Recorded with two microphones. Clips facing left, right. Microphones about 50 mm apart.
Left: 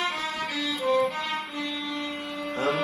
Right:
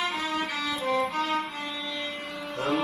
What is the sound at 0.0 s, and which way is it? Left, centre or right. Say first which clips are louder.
Violin: even; centre.